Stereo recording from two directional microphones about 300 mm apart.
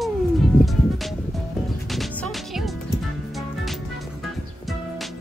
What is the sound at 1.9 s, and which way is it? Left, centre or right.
Music, centre.